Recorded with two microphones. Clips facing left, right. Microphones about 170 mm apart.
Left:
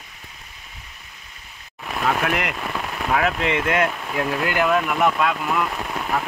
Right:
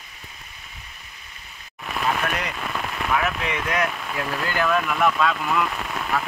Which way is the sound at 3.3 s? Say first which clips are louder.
Left 5 dB; 25° left (ahead or behind).